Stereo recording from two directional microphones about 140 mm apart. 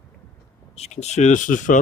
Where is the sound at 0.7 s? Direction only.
50° left (ahead or behind).